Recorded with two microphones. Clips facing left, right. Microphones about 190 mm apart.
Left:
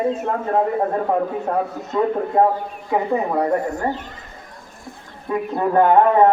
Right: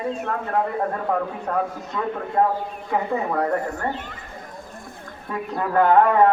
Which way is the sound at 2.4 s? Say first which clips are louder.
Left 4 dB; 20° left (ahead or behind).